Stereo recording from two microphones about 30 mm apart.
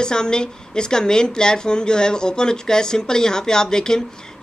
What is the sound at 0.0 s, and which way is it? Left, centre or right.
Speech, left.